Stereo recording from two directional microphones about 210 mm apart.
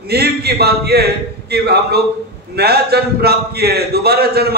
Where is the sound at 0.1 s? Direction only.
50° right (ahead or behind).